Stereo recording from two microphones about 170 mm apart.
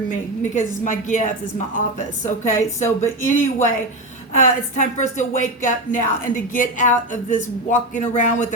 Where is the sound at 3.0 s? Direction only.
45° left (ahead or behind).